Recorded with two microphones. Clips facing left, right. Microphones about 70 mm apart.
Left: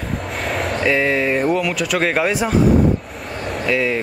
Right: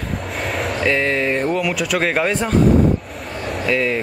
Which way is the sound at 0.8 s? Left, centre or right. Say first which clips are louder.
Left 1 dB; centre.